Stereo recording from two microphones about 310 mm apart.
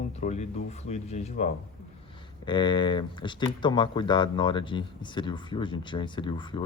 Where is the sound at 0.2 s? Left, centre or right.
Left.